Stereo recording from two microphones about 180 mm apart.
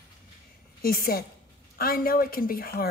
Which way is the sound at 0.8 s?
55° left (ahead or behind).